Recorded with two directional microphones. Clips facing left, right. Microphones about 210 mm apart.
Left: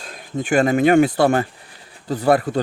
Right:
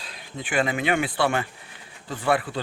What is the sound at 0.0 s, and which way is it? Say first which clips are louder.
Speech: left 10 dB; 45° left (ahead or behind).